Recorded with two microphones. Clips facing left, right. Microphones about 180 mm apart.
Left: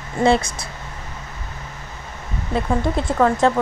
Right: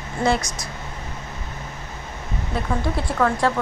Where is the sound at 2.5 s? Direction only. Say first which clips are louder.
Left 4 dB; 20° left (ahead or behind).